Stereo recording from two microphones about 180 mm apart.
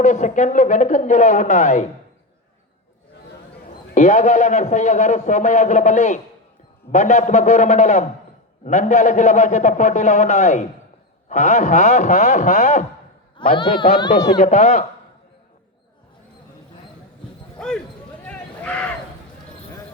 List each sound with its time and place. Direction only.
0.0 s speech: 40° left (ahead or behind)
3.9 s a man's voice: 40° left (ahead or behind)
13.5 s speech: 30° left (ahead or behind)
14.3 s a man's voice: 40° left (ahead or behind)
17.6 s a sound: 5° left (ahead or behind)